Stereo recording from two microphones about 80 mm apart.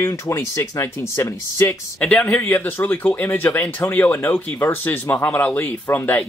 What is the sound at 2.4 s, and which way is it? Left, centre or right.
Speech, left.